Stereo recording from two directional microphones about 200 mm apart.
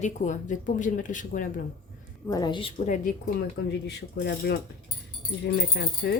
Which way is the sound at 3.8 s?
55° left (ahead or behind).